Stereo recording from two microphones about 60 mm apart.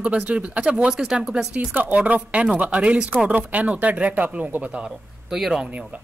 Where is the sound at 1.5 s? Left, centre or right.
Right.